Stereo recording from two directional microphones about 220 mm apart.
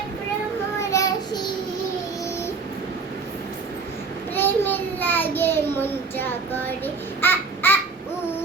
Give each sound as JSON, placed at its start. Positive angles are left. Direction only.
{"t": 0.8, "sound": "child singing", "side_deg": 15}
{"t": 4.4, "sound": "child singing", "side_deg": 10}